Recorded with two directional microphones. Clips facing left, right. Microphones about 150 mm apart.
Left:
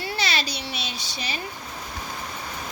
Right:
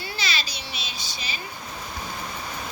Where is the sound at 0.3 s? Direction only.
65° left (ahead or behind).